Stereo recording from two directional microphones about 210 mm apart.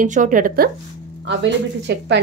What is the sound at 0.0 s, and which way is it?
Speech, 35° right (ahead or behind).